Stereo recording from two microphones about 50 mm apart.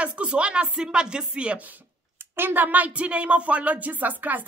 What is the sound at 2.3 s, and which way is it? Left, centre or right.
Speech, right.